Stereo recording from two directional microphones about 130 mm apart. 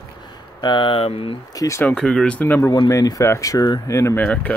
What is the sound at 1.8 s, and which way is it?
Speech, 5° left (ahead or behind).